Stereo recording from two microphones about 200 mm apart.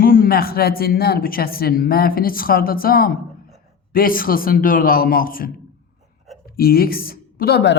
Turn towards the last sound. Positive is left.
turn(degrees=55)  # may be behind; listen again after turning